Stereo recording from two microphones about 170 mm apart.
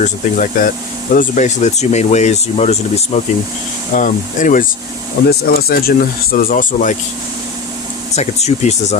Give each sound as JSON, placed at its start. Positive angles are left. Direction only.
{"t": 0.0, "sound": "speech", "side_deg": 45}
{"t": 3.9, "sound": "speech", "side_deg": 50}
{"t": 5.3, "sound": "speech", "side_deg": 65}
{"t": 8.1, "sound": "speech", "side_deg": 40}